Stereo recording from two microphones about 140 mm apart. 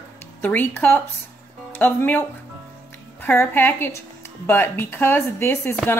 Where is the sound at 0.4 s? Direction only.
15° left (ahead or behind).